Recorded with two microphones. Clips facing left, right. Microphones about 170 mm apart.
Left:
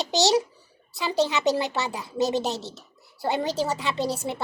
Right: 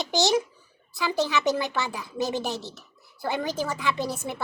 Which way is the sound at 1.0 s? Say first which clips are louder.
Left 1 dB; 20° left (ahead or behind).